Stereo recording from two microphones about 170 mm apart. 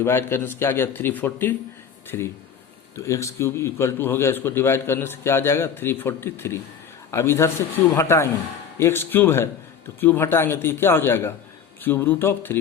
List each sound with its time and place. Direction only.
0.0 s a man's voice: 15° left (ahead or behind)